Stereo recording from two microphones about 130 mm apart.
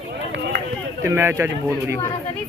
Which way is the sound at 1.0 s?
20° right (ahead or behind).